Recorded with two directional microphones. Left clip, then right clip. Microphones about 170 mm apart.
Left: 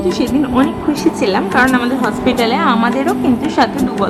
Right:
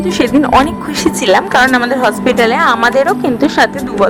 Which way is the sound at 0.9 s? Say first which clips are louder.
Right 3 dB; 45° right (ahead or behind).